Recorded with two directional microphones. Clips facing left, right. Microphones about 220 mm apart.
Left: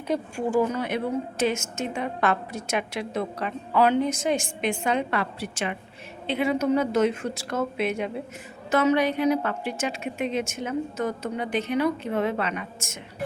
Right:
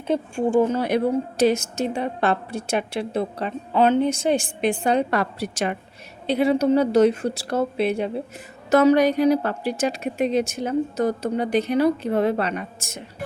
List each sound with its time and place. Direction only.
0.1 s a woman's voice: 25° right (ahead or behind)